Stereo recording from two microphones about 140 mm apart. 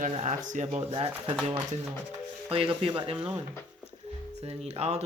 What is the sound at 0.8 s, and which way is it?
Speech, 40° right (ahead or behind).